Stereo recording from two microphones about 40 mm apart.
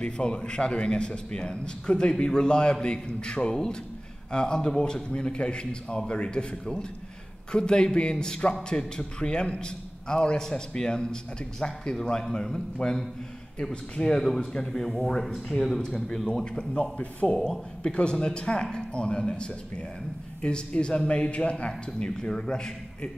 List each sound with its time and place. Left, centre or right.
0.0 s a man's voice: left
14.0 s speech: centre
15.8 s a man's voice: centre